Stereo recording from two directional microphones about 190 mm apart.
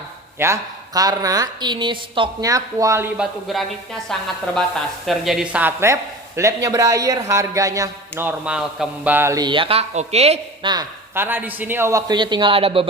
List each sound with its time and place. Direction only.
0.3 s a woman's voice: 15° right (ahead or behind)
3.2 s a woman's voice: centre (ahead or behind); by 10.7 s 35° right (ahead or behind)
10.7 s a woman's voice: 15° right (ahead or behind)